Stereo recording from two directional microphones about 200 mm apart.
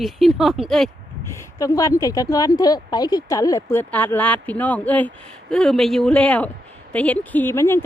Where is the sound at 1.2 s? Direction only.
15° left (ahead or behind).